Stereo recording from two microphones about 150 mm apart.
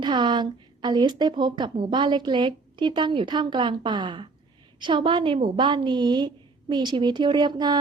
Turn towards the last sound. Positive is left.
turn(degrees=-30)  # may be behind; listen again after turning